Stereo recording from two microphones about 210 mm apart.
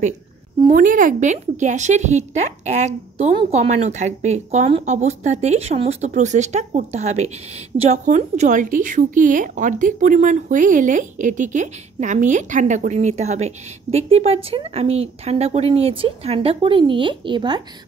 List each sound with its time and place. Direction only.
0.7 s a woman's voice: 40° right (ahead or behind); by 17.6 s 20° right (ahead or behind)